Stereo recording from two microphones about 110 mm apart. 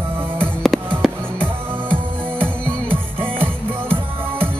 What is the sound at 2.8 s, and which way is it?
Music, 55° right (ahead or behind).